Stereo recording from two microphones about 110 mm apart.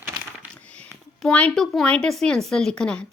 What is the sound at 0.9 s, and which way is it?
Speech, 5° left (ahead or behind).